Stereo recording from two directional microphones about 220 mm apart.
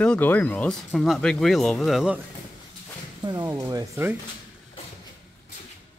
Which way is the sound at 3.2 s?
15° right (ahead or behind).